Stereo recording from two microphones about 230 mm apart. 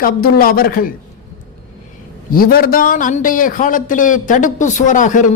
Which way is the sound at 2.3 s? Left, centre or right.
Left.